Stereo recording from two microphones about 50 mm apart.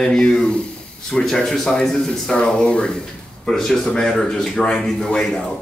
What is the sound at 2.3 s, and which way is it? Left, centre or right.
Speech, left.